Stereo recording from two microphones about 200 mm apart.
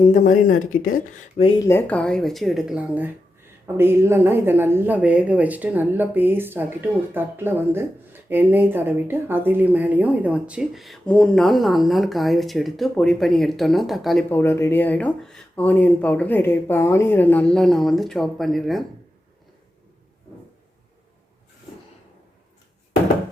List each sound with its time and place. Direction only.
0.4 s speech: 90° left
0.9 s speech: 30° left (ahead or behind)
1.6 s speech: 10° left (ahead or behind)